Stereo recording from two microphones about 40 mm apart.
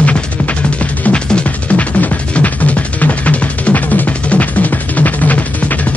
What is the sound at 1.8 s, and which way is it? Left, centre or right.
Music, left.